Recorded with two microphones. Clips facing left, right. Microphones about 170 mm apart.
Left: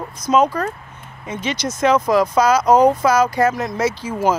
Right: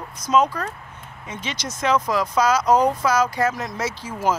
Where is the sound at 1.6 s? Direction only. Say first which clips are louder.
Left 5 dB; 50° left (ahead or behind).